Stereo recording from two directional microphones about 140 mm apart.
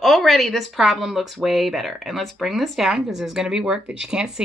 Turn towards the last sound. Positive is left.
turn(degrees=-5)  # may be behind; listen again after turning